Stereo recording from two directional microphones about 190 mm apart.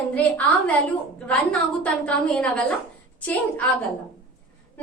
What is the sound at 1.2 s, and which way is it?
A woman's voice, 5° left (ahead or behind).